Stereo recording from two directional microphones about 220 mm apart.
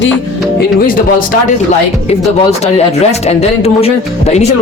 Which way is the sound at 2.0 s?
30° left (ahead or behind).